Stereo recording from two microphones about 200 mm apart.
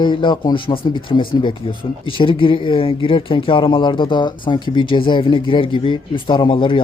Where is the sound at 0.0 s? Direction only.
25° left (ahead or behind).